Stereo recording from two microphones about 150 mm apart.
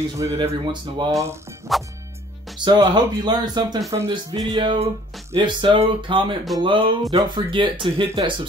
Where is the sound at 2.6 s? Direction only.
30° right (ahead or behind).